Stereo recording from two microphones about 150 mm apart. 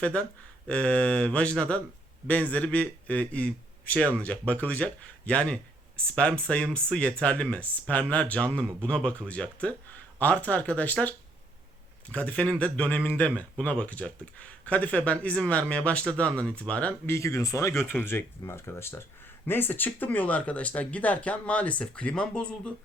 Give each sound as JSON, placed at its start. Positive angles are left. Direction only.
{"t": 0.0, "sound": "speech", "side_deg": 10}
{"t": 17.2, "sound": "speech", "side_deg": 20}